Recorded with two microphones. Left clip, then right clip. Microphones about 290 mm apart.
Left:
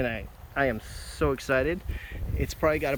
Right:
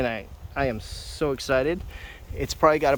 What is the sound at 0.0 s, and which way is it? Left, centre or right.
Speech, centre.